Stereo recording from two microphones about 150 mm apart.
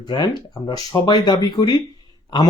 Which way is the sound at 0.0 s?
30° left (ahead or behind).